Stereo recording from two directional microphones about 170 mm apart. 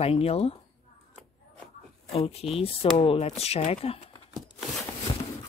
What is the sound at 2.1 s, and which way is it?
Speech, 35° left (ahead or behind).